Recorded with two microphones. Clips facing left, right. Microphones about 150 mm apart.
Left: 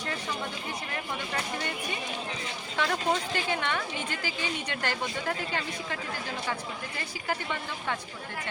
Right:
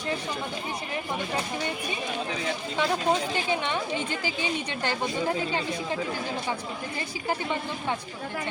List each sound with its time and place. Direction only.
1.3 s speech: 15° right (ahead or behind)
2.7 s a woman's voice: 20° right (ahead or behind)
7.3 s a woman's voice: 20° right (ahead or behind)